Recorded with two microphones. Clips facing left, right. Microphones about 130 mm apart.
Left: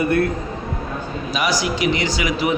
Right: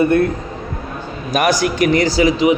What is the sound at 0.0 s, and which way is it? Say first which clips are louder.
Speech: right 5 dB; 25° right (ahead or behind).